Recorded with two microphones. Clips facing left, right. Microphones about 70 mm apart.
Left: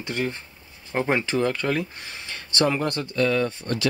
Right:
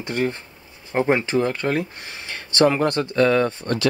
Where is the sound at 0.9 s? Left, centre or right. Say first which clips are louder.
Right 4 dB; centre.